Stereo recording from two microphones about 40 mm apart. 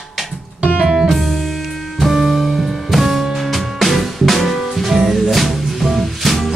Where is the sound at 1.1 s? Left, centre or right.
Centre.